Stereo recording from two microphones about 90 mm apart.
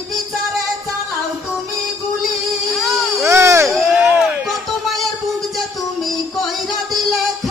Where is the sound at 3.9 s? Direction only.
10° right (ahead or behind).